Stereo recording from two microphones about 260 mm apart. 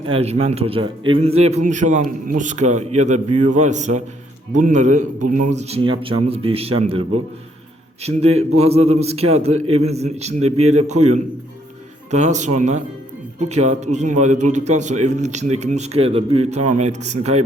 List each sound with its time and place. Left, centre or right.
0.0 s a man's voice: right